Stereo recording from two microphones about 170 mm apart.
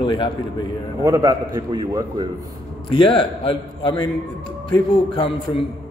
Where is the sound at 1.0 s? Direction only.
20° right (ahead or behind).